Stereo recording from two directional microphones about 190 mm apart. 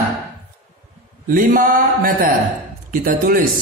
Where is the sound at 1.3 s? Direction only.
45° right (ahead or behind).